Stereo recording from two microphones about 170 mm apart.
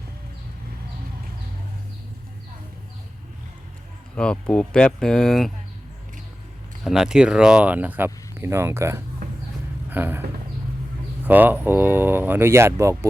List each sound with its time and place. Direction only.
4.1 s speech: 5° left (ahead or behind)
6.8 s speech: 5° right (ahead or behind)
11.3 s speech: 10° right (ahead or behind)